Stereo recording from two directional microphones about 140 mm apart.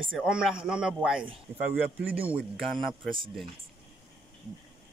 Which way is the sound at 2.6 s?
Centre (ahead or behind).